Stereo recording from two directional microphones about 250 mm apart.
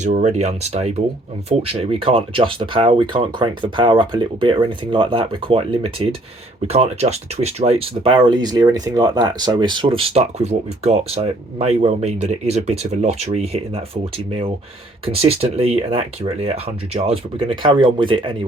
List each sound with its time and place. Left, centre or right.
0.0 s speech: right